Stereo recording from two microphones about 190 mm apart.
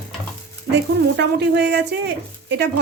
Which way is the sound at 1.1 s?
65° right (ahead or behind).